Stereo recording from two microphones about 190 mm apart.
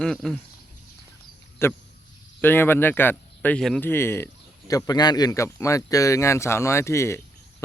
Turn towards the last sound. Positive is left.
turn(degrees=15)  # may be behind; listen again after turning